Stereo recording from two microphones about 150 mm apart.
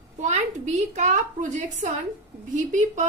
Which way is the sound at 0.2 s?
55° right (ahead or behind).